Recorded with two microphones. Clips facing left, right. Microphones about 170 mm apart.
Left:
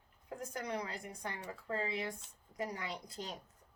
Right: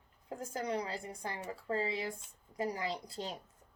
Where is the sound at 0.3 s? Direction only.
30° right (ahead or behind).